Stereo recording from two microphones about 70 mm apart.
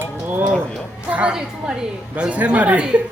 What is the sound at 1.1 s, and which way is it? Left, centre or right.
Speech, centre.